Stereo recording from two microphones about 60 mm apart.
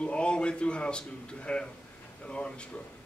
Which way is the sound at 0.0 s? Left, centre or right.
Centre.